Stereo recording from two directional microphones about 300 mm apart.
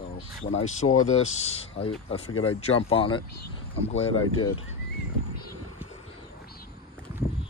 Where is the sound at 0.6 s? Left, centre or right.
Left.